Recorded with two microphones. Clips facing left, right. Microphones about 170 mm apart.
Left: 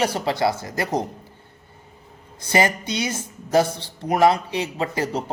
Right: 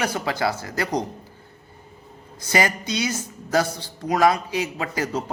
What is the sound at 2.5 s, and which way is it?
A man's voice, 25° left (ahead or behind).